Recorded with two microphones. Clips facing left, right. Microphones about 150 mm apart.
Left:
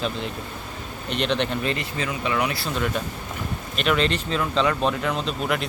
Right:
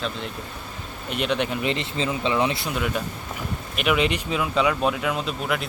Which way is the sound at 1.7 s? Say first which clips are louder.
Right 2 dB; 25° right (ahead or behind).